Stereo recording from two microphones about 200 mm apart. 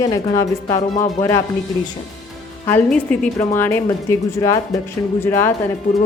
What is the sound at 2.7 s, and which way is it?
Speech, 5° left (ahead or behind).